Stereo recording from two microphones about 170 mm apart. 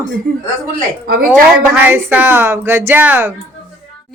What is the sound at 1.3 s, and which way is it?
Speech, 10° right (ahead or behind).